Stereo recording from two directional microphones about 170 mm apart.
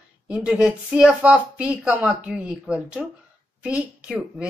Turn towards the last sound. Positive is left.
turn(degrees=-5)  # may be behind; listen again after turning